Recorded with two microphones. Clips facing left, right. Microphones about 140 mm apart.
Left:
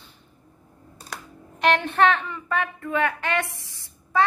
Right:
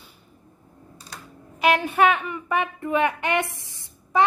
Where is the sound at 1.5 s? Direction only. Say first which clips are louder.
Right 1 dB; 5° right (ahead or behind).